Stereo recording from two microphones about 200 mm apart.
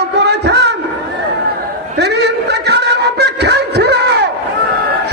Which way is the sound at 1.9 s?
55° right (ahead or behind).